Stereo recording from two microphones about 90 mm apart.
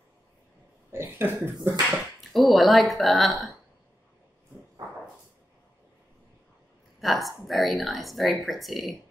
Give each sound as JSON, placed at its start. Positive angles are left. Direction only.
{"t": 0.9, "sound": "speech", "side_deg": -25}
{"t": 1.7, "sound": "a woman's voice", "side_deg": 0}
{"t": 7.0, "sound": "a woman's voice", "side_deg": 0}